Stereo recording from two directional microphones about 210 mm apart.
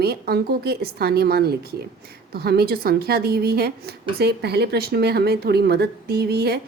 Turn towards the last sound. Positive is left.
turn(degrees=-50)  # may be behind; listen again after turning